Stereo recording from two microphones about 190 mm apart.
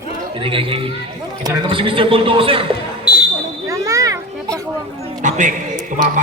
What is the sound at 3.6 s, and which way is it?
Children playing, 15° right (ahead or behind).